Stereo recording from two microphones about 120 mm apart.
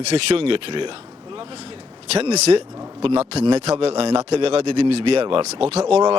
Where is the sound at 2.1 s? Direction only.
60° right (ahead or behind).